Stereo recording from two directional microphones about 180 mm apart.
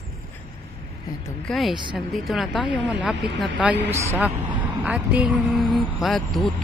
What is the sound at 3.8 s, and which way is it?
A woman's voice, 15° right (ahead or behind).